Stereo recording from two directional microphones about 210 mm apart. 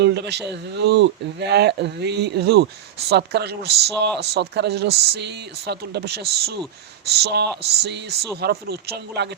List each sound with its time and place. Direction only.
0.0 s speech: 55° right (ahead or behind)